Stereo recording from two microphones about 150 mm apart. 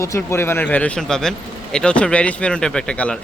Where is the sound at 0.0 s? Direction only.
20° left (ahead or behind).